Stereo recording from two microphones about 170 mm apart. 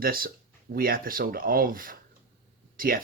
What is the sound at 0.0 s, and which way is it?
Speech, 60° right (ahead or behind).